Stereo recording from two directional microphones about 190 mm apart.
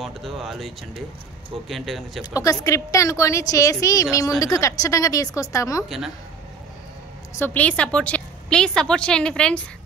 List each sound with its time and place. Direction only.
0.0 s a woman's voice: centre (ahead or behind)
2.3 s a woman's voice: 15° left (ahead or behind)
5.9 s a woman's voice: centre (ahead or behind)
7.3 s a woman's voice: 10° left (ahead or behind)